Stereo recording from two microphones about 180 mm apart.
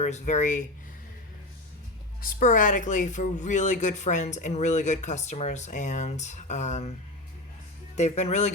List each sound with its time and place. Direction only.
0.0 s speech: 40° left (ahead or behind)
2.2 s speech: 45° left (ahead or behind)
7.9 s speech: 40° left (ahead or behind)